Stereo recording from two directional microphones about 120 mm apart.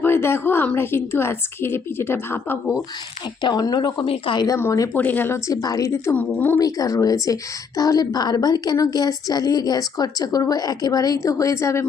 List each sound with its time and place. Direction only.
0.0 s a woman's voice: 20° left (ahead or behind)
3.4 s a woman's voice: 35° left (ahead or behind)
4.0 s speech: 45° left (ahead or behind)
4.4 s a woman's voice: 25° left (ahead or behind)